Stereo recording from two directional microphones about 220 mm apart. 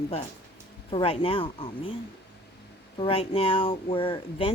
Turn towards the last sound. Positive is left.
turn(degrees=25)  # may be behind; listen again after turning